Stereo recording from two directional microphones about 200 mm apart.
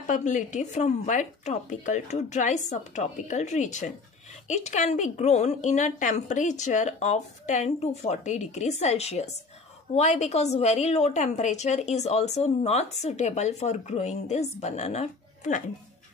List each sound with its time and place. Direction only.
0.0 s a woman's voice: 40° left (ahead or behind)